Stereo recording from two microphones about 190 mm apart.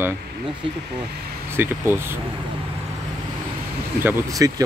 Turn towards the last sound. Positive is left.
turn(degrees=-20)  # may be behind; listen again after turning